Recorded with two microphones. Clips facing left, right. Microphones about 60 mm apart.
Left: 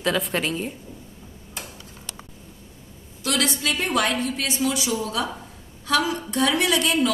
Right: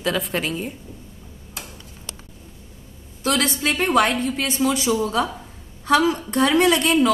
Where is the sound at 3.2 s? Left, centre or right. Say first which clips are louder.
Right 3 dB; right.